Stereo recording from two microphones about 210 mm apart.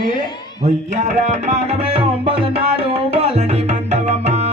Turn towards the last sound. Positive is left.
turn(degrees=-30)  # may be behind; listen again after turning